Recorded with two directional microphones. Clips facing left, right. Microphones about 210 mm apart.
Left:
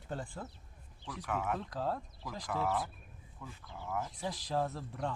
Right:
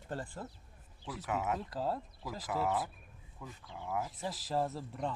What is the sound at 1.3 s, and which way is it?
Speech, 20° right (ahead or behind).